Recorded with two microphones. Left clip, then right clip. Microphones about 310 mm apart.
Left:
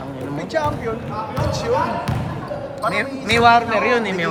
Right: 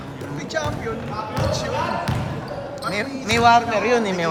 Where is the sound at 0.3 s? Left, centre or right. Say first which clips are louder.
Left 4 dB; left.